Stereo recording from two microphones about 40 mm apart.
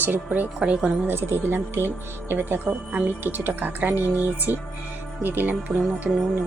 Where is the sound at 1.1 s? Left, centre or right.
Right.